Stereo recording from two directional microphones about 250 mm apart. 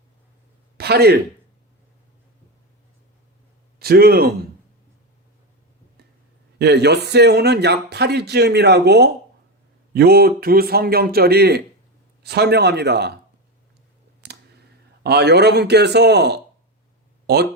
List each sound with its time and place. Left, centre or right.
0.8 s a man's voice: right
3.8 s a man's voice: right
6.6 s a man's voice: right
15.0 s a man's voice: right